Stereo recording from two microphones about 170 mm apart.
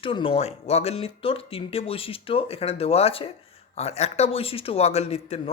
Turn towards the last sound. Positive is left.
turn(degrees=40)  # may be behind; listen again after turning